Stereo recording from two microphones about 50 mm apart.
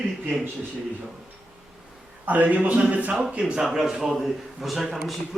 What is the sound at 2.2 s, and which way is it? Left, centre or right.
Speech, right.